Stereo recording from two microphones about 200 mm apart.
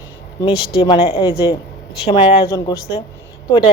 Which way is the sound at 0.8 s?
30° left (ahead or behind).